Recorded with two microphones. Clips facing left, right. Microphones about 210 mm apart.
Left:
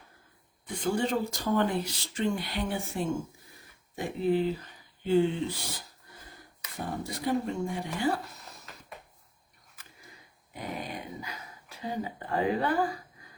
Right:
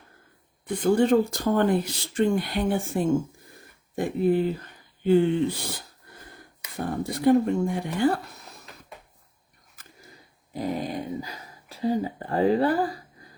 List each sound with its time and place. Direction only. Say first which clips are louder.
0.7 s speech: right 9 dB; 55° right (ahead or behind)
7.0 s speech: right 11 dB; 55° right (ahead or behind)
10.5 s speech: right 9 dB; 35° right (ahead or behind)